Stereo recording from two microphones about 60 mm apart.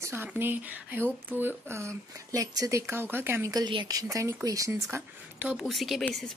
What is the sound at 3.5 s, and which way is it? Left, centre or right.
Speech, right.